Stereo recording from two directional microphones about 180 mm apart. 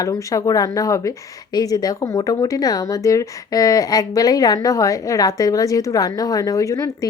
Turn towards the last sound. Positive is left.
turn(degrees=15)  # may be behind; listen again after turning